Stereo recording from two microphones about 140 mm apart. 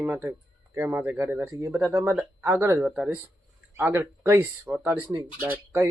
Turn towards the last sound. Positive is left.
turn(degrees=-15)  # may be behind; listen again after turning